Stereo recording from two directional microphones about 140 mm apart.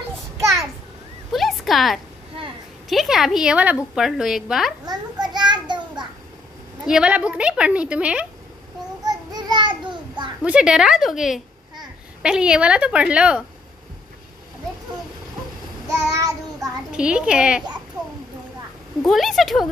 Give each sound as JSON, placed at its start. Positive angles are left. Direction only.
{"t": 1.3, "sound": "a sound", "side_deg": 0}
{"t": 2.9, "sound": "a woman's voice", "side_deg": 0}
{"t": 4.8, "sound": "a sound", "side_deg": -30}
{"t": 6.9, "sound": "a woman's voice", "side_deg": -5}
{"t": 9.0, "sound": "a sound", "side_deg": -30}
{"t": 10.4, "sound": "a woman's voice", "side_deg": -5}
{"t": 15.9, "sound": "child singing", "side_deg": -25}
{"t": 16.9, "sound": "a woman's voice", "side_deg": -5}
{"t": 19.0, "sound": "a woman's voice", "side_deg": 0}